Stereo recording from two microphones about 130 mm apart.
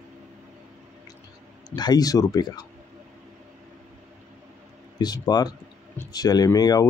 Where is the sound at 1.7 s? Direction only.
30° left (ahead or behind).